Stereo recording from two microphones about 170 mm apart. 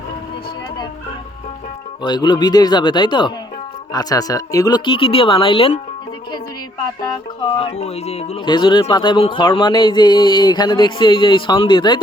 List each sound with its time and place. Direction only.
2.0 s speech: 25° left (ahead or behind)
7.0 s speech: 30° left (ahead or behind)
8.4 s speech: 25° left (ahead or behind)